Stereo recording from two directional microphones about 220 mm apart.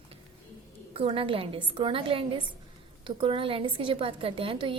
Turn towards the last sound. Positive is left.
turn(degrees=-25)  # may be behind; listen again after turning